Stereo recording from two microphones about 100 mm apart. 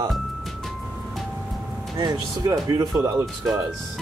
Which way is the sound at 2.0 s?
45° right (ahead or behind).